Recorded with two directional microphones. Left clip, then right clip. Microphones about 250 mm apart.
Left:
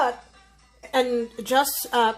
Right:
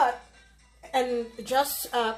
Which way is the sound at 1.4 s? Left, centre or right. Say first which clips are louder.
Left 4 dB; left.